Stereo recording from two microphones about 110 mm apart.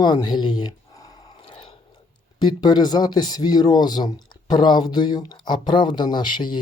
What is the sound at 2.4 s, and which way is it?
Speech, 40° left (ahead or behind).